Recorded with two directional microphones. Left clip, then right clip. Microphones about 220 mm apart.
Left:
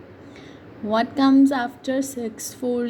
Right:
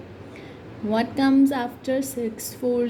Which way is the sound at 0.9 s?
25° left (ahead or behind).